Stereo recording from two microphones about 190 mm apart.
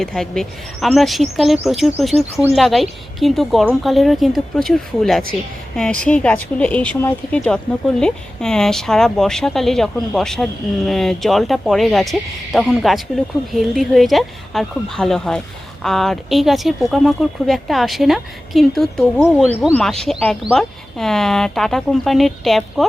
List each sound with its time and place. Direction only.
0.0 s speech: centre (ahead or behind)